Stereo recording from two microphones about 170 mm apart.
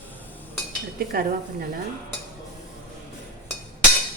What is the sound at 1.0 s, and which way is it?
Speech, 60° right (ahead or behind).